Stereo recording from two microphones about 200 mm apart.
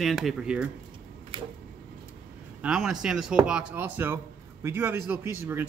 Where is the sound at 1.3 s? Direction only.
25° right (ahead or behind).